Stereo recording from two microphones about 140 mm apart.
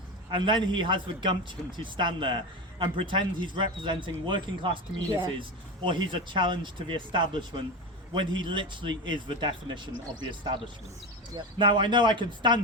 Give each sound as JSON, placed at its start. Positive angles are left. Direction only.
{"t": 0.3, "sound": "a man's voice", "side_deg": -35}
{"t": 11.3, "sound": "a man's voice", "side_deg": -35}